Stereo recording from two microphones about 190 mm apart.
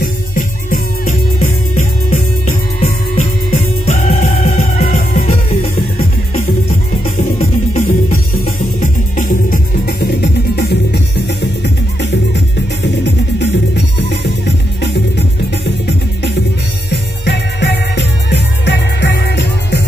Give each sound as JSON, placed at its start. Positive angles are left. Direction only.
{"t": 0.0, "sound": "music", "side_deg": 45}
{"t": 7.3, "sound": "music", "side_deg": 35}
{"t": 16.9, "sound": "music", "side_deg": 65}